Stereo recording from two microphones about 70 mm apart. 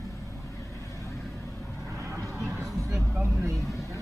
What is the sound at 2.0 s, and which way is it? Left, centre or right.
Vehicle, right.